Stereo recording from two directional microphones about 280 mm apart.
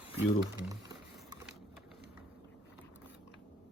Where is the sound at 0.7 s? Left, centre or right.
Centre.